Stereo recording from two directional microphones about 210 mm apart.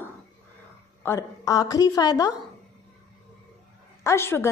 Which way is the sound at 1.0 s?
15° left (ahead or behind).